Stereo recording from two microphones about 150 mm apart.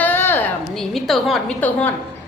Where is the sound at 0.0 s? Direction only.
15° left (ahead or behind).